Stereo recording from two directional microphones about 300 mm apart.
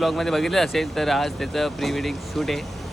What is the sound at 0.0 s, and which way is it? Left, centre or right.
A man's voice, centre.